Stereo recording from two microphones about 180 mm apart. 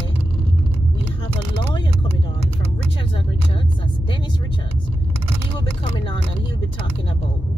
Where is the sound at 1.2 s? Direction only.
30° left (ahead or behind).